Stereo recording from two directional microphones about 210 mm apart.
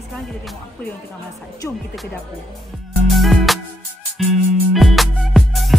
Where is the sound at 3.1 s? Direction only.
Centre (ahead or behind).